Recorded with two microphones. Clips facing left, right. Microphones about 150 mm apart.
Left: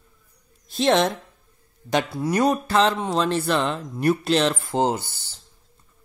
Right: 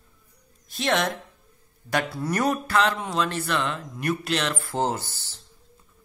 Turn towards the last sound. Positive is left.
turn(degrees=15)  # may be behind; listen again after turning